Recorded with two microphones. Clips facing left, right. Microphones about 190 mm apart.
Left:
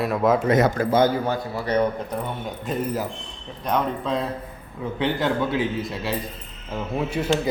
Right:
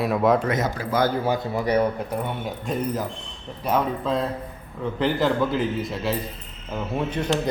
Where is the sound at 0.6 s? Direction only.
50° left (ahead or behind).